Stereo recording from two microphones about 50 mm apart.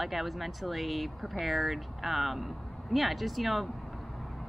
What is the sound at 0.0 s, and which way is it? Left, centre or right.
Speech, centre.